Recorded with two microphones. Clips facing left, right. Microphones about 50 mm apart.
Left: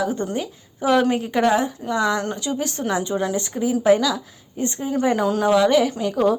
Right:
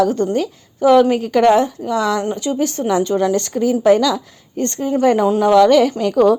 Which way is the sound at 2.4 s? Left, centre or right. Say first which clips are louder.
Right 6 dB; right.